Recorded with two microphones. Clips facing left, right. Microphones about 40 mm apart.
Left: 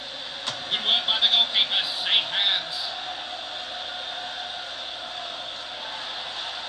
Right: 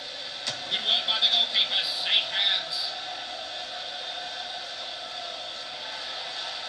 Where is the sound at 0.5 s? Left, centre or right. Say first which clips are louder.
Left 3 dB; left.